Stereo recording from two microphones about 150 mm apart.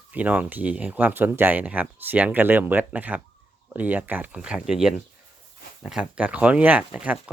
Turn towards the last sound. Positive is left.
turn(degrees=-10)  # may be behind; listen again after turning